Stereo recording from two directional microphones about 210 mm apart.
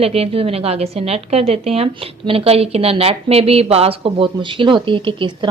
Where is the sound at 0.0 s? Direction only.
30° right (ahead or behind).